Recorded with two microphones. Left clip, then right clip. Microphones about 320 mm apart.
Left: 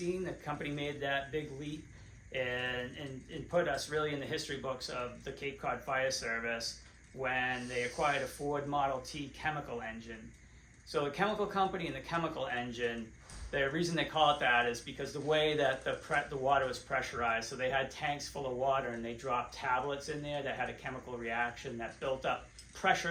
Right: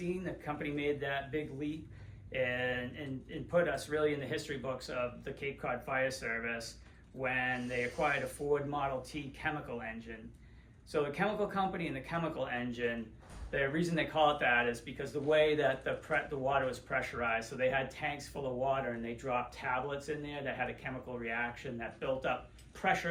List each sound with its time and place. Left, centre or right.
0.0 s speech: centre